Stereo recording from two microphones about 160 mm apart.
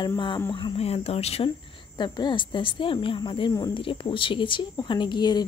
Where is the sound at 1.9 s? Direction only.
30° left (ahead or behind).